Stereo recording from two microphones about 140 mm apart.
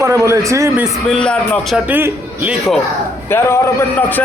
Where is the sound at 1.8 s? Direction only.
15° right (ahead or behind).